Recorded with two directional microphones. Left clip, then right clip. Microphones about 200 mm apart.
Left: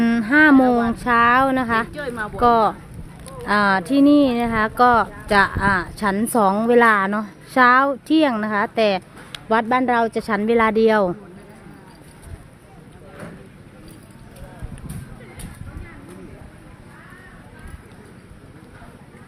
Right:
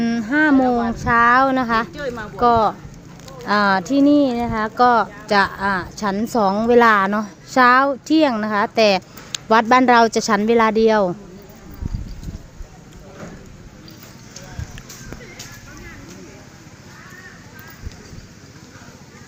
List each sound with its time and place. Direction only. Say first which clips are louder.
0.0 s a sound: left 3 dB; 15° left (ahead or behind)
0.9 s speech: right 3 dB; 5° left (ahead or behind)
1.9 s speech: even; 60° left (ahead or behind)
2.4 s speech: right 1 dB; 5° left (ahead or behind)
9.5 s a woman's voice: right 5 dB; 15° right (ahead or behind); by 11.2 s 5° left (ahead or behind)